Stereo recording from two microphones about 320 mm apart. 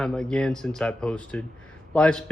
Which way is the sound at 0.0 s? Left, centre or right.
Centre.